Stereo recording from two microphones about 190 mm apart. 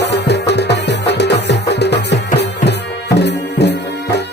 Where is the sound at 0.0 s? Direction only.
60° left (ahead or behind).